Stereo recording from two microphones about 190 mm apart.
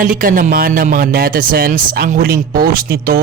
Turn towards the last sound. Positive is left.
turn(degrees=-50)  # may be behind; listen again after turning